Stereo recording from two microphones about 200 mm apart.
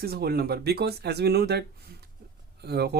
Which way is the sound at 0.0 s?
50° right (ahead or behind).